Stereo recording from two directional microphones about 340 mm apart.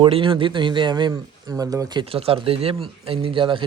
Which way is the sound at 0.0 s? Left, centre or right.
Centre.